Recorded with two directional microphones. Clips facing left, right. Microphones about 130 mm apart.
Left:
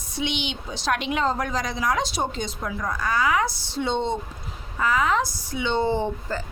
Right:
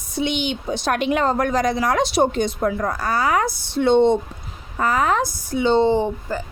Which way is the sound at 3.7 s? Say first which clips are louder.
Right 14 dB; 60° right (ahead or behind).